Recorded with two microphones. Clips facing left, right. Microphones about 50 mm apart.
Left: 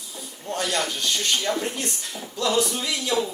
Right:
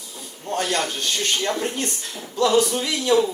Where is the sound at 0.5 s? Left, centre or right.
Right.